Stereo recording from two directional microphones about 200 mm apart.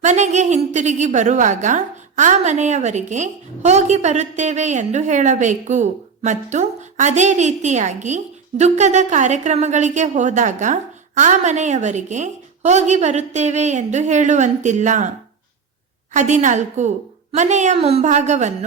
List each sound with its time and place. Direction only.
0.0 s a woman's voice: 35° right (ahead or behind)
16.1 s a woman's voice: 35° right (ahead or behind)